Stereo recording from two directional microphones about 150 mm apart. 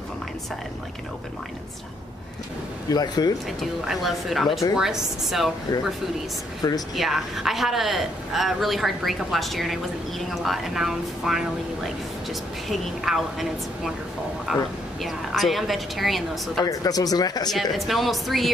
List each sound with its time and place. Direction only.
2.9 s speech: 25° left (ahead or behind)
3.4 s speech: centre (ahead or behind)
6.6 s speech: 25° left (ahead or behind)
7.0 s speech: centre (ahead or behind)
16.6 s speech: 25° left (ahead or behind)
17.5 s speech: centre (ahead or behind)